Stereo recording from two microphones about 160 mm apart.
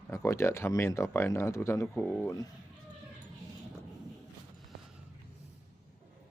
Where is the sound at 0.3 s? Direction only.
15° left (ahead or behind).